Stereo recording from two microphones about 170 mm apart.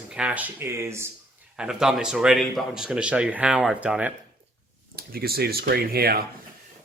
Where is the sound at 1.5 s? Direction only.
5° right (ahead or behind).